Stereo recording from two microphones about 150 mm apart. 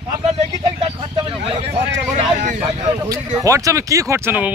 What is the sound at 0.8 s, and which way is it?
A man's voice, 35° right (ahead or behind).